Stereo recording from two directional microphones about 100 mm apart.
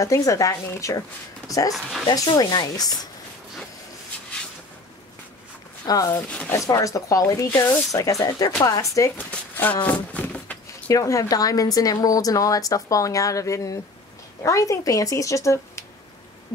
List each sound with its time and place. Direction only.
0.0 s a woman's voice: 35° left (ahead or behind)
1.7 s speech: centre (ahead or behind)
2.1 s a woman's voice: 40° left (ahead or behind)
5.9 s a woman's voice: 35° left (ahead or behind)
6.2 s speech: 15° left (ahead or behind)
6.5 s a woman's voice: 35° left (ahead or behind)
9.1 s a sound: 15° left (ahead or behind)
10.9 s a woman's voice: 35° left (ahead or behind)